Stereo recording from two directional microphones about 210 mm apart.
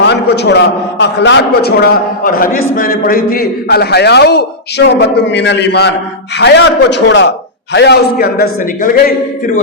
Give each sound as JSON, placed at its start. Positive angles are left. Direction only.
{"t": 0.0, "sound": "a man's voice", "side_deg": 55}